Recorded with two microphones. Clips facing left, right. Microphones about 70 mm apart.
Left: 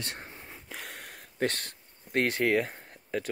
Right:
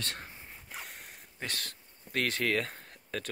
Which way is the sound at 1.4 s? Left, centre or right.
Left.